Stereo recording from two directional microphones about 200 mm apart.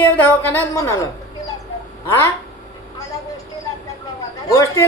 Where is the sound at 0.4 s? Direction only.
10° left (ahead or behind).